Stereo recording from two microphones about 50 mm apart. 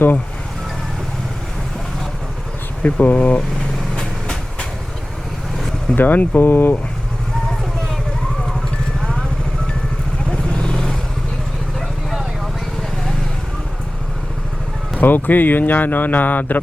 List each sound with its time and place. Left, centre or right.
2.8 s speech: left
5.5 s vehicle: centre
6.0 s speech: left
10.5 s vehicle: centre
14.9 s speech: left